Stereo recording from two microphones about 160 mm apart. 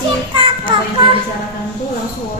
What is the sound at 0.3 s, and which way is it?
Child singing, 30° right (ahead or behind).